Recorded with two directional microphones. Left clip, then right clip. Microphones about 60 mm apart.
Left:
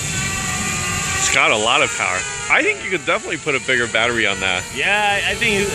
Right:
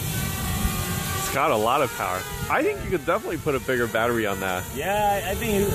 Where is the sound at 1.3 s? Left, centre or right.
Right.